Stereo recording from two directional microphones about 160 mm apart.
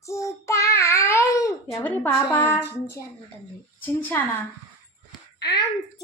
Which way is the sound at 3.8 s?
10° left (ahead or behind).